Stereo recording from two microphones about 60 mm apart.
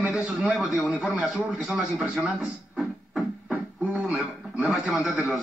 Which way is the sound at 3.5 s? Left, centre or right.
Centre.